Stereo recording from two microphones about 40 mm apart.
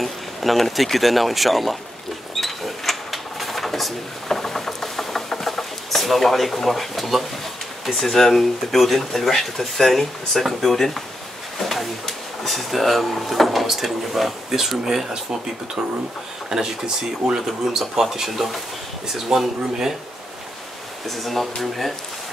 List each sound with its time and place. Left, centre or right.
0.0 s speech: centre
2.4 s a sound: centre
7.8 s speech: centre
11.6 s a sound: centre
12.1 s speech: centre
16.4 s speech: centre
21.2 s speech: centre